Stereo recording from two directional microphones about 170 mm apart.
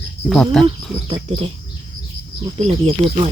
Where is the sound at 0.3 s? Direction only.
Centre (ahead or behind).